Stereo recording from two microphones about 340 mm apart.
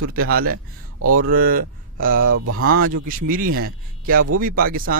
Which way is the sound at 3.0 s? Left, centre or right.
Right.